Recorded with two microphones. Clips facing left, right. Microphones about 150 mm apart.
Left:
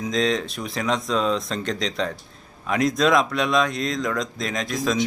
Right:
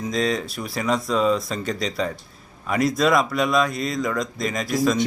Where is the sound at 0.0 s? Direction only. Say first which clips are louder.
Left 1 dB; 5° right (ahead or behind).